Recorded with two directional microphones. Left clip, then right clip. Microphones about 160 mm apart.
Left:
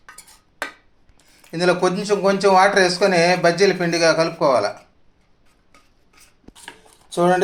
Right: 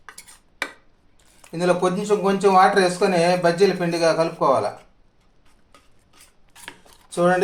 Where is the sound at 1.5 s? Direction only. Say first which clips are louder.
Left 2 dB; 15° left (ahead or behind).